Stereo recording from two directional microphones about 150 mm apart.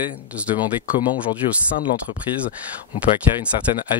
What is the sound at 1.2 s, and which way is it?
Speech, 90° left.